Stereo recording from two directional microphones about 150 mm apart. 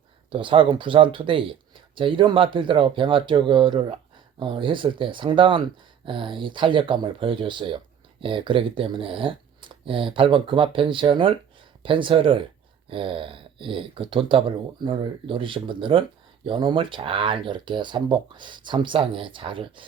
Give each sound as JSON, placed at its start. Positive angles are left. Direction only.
{"t": 0.3, "sound": "speech", "side_deg": -35}